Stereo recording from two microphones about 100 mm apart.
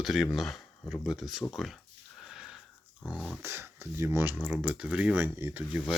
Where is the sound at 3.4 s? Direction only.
25° right (ahead or behind).